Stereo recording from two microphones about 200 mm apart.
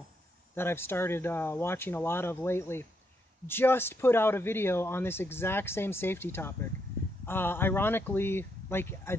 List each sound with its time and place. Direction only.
0.6 s speech: 10° left (ahead or behind)